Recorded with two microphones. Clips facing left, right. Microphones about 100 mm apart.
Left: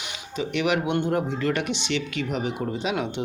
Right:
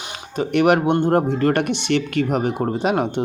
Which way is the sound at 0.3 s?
50° right (ahead or behind).